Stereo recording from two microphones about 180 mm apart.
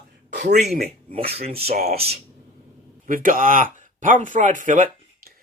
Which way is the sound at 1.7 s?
60° right (ahead or behind).